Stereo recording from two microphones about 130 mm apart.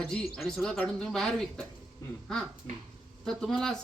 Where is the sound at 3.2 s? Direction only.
5° left (ahead or behind).